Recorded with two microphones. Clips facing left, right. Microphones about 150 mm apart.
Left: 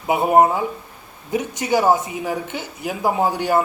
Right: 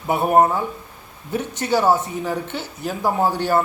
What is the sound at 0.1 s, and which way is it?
Speech, 10° left (ahead or behind).